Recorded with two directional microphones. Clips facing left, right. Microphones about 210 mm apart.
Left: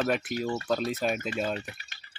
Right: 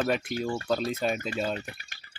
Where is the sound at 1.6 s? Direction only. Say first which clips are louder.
Even; 50° right (ahead or behind).